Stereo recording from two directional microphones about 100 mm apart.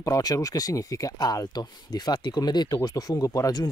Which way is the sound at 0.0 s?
35° left (ahead or behind).